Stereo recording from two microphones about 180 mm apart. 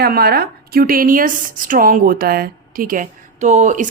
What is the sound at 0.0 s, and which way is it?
Speech, 60° right (ahead or behind).